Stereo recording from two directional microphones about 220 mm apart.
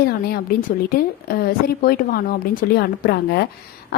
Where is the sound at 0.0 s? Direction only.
45° left (ahead or behind).